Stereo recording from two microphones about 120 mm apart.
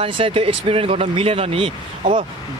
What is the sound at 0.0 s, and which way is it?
Speech, 50° right (ahead or behind).